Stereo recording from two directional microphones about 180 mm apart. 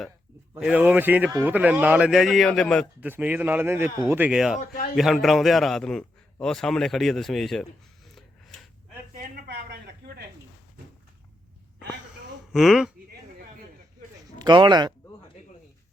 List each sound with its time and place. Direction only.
0.6 s a man's voice: 5° right (ahead or behind)
3.0 s a man's voice: 10° right (ahead or behind)
9.1 s a sound: 55° right (ahead or behind)
12.5 s speech: centre (ahead or behind)
14.3 s speech: 25° right (ahead or behind)